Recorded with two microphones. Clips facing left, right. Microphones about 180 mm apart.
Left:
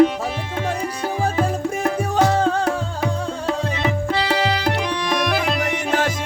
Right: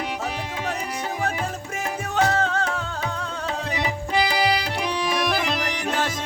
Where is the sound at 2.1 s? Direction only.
35° left (ahead or behind).